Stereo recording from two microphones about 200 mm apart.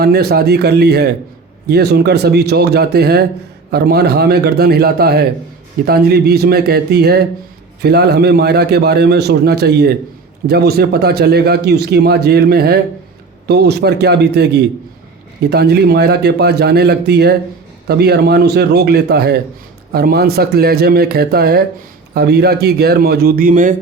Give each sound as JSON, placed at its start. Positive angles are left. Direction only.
{"t": 0.0, "sound": "a man's voice", "side_deg": -50}